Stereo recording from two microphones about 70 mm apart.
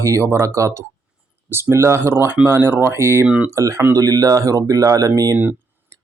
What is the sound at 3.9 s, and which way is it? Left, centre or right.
Speech, right.